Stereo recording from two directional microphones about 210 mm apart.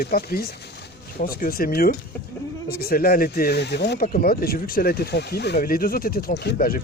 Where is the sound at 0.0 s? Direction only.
45° left (ahead or behind).